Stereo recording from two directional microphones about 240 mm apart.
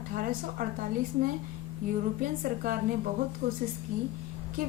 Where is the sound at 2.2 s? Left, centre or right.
Right.